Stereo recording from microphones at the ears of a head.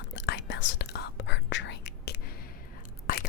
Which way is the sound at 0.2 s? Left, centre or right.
Left.